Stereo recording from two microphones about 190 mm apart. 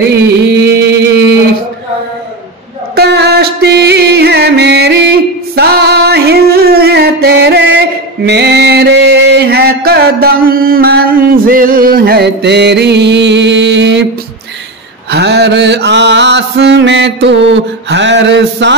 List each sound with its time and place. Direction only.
0.7 s a sound: 60° right (ahead or behind)
3.0 s music: 55° right (ahead or behind)
15.0 s mantra: 60° right (ahead or behind)